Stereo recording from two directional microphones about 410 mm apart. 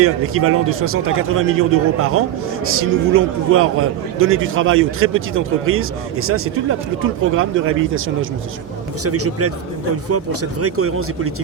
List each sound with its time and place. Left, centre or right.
0.0 s a man's voice: right
10.6 s a man's voice: right